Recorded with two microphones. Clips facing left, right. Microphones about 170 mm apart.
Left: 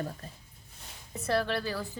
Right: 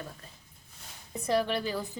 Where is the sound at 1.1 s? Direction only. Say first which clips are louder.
Right 1 dB; 15° right (ahead or behind).